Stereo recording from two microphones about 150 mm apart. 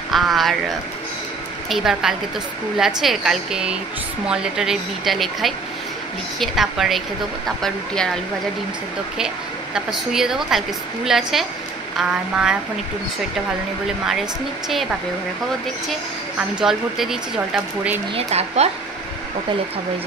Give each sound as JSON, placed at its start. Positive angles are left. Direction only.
{"t": 0.1, "sound": "a woman's voice", "side_deg": 0}
{"t": 1.7, "sound": "a woman's voice", "side_deg": 0}
{"t": 9.8, "sound": "a woman's voice", "side_deg": -5}
{"t": 14.7, "sound": "a woman's voice", "side_deg": 0}
{"t": 18.1, "sound": "speech", "side_deg": -45}